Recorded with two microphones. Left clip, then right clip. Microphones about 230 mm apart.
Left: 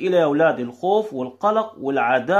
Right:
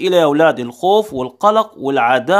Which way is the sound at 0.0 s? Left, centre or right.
Right.